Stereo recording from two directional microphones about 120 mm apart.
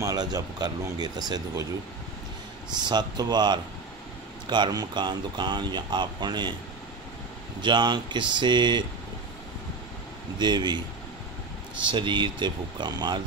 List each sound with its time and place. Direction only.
0.0 s speech: 30° right (ahead or behind)
2.7 s speech: 35° right (ahead or behind)
7.6 s speech: 40° right (ahead or behind)
10.4 s speech: 40° right (ahead or behind)
11.8 s speech: 40° right (ahead or behind)